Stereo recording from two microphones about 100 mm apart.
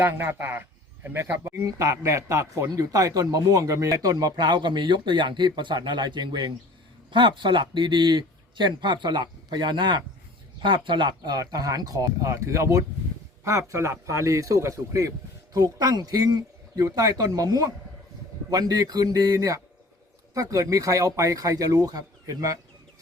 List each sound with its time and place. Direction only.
0.0 s speech: 20° right (ahead or behind)